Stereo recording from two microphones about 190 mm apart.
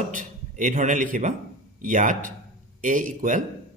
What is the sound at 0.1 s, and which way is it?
A man's voice, 45° right (ahead or behind).